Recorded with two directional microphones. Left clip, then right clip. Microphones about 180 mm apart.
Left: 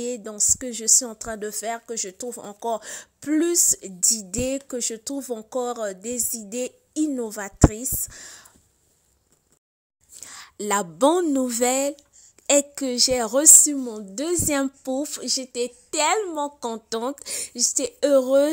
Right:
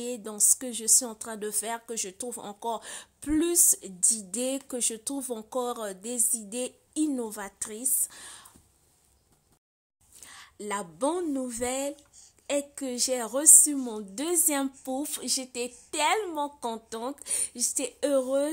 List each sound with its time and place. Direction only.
0.0 s speech: 20° left (ahead or behind)
10.2 s a woman's voice: 40° left (ahead or behind)
13.7 s a woman's voice: 20° left (ahead or behind); by 18.5 s 35° left (ahead or behind)